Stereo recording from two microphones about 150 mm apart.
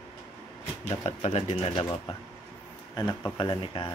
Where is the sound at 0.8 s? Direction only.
40° left (ahead or behind).